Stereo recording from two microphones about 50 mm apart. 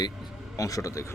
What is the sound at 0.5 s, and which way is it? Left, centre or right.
Speech, left.